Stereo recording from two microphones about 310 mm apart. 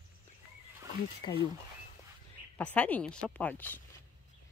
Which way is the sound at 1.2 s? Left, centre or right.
Centre.